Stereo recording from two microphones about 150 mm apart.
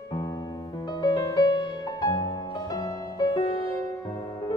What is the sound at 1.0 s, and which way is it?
Music, 25° left (ahead or behind).